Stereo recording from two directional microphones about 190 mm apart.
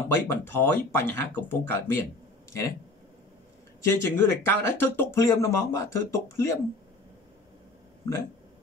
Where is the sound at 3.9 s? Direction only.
15° left (ahead or behind).